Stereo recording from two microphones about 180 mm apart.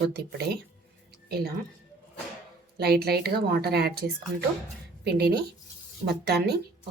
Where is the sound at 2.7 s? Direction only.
60° right (ahead or behind).